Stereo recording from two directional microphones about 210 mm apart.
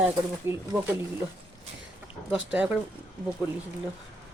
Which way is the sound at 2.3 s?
5° right (ahead or behind).